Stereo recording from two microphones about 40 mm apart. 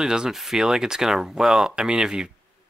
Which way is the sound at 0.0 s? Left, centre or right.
Centre.